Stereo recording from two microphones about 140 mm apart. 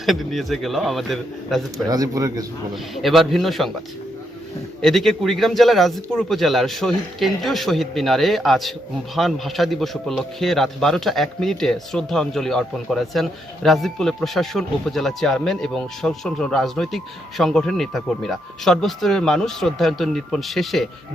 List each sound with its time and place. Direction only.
0.0 s a man's voice: centre (ahead or behind)
1.9 s speech: 25° right (ahead or behind)
2.7 s a man's voice: centre (ahead or behind)
4.8 s a man's voice: centre (ahead or behind)